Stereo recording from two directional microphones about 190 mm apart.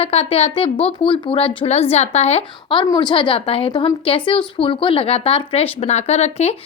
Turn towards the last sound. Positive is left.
turn(degrees=35)  # may be behind; listen again after turning